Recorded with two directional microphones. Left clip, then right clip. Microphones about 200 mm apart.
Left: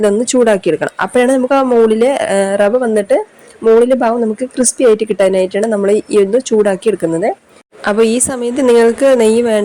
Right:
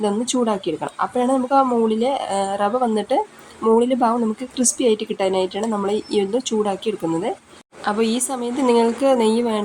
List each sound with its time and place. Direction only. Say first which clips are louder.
0.0 s a woman's voice: left 10 dB; 30° left (ahead or behind)